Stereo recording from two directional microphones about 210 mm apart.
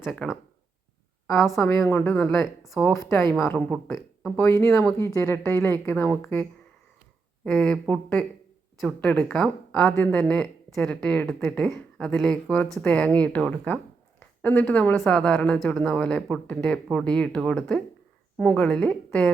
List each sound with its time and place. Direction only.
0.0 s speech: centre (ahead or behind)
1.4 s speech: centre (ahead or behind)
2.9 s speech: 15° left (ahead or behind)
3.9 s speech: centre (ahead or behind)
4.4 s speech: 15° left (ahead or behind)
7.4 s speech: 5° left (ahead or behind)